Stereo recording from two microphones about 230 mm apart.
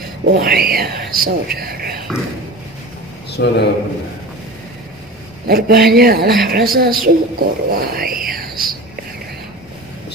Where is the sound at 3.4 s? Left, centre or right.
Left.